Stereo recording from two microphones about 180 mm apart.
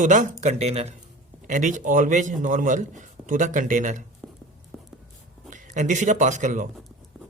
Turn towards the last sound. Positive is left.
turn(degrees=-45)  # may be behind; listen again after turning